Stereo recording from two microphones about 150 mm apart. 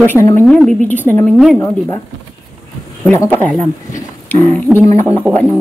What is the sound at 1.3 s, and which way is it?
Speech, centre (ahead or behind).